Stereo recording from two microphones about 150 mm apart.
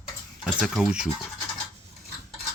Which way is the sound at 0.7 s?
Centre (ahead or behind).